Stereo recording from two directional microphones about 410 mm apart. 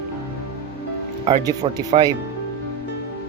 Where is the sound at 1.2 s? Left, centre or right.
Centre.